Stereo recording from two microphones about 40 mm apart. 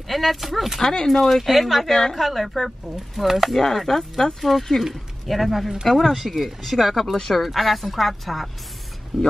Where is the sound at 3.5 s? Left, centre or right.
Centre.